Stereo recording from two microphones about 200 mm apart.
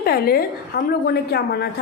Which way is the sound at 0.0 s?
50° left (ahead or behind).